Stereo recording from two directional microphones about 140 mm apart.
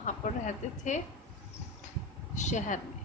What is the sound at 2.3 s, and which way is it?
Speech, 60° left (ahead or behind).